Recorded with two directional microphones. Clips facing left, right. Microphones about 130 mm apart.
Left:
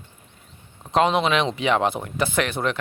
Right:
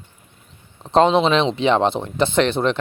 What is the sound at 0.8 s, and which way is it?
Speech, 30° right (ahead or behind).